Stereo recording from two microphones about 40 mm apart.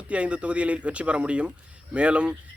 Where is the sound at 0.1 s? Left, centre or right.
Right.